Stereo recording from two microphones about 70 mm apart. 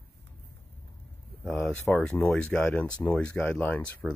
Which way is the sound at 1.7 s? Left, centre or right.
Centre.